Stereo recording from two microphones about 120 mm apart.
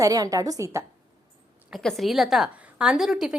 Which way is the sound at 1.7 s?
Centre (ahead or behind).